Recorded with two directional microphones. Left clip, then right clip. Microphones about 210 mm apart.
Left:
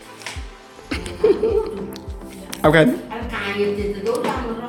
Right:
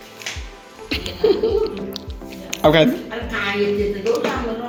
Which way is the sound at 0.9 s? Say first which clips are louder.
Even; 20° left (ahead or behind).